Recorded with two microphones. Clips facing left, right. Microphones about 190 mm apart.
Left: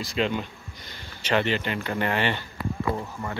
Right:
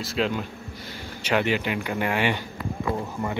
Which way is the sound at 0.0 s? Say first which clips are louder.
Even; centre (ahead or behind).